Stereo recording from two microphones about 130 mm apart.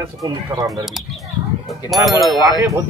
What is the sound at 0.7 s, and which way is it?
Speech, 5° right (ahead or behind).